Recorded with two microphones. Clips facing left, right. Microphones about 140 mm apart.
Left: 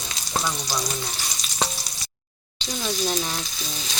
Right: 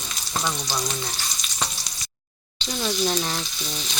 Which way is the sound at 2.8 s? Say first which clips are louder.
Right 2 dB; centre (ahead or behind).